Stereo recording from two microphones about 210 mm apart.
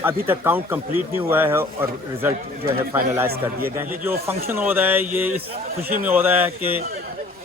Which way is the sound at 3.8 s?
10° right (ahead or behind).